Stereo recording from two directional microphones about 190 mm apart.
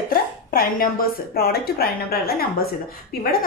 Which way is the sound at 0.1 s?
50° left (ahead or behind).